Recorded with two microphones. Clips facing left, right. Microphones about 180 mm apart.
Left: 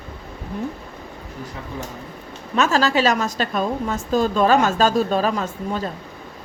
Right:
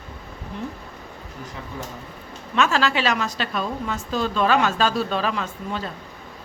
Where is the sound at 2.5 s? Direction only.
40° left (ahead or behind).